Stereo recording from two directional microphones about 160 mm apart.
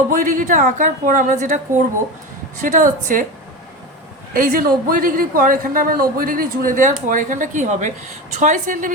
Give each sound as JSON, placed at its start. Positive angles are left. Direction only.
{"t": 0.1, "sound": "a woman's voice", "side_deg": -55}
{"t": 4.4, "sound": "a man's voice", "side_deg": -65}